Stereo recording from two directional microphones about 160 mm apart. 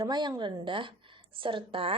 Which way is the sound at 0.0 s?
30° right (ahead or behind).